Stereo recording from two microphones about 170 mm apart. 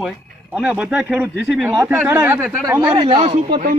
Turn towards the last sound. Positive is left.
turn(degrees=-30)  # may be behind; listen again after turning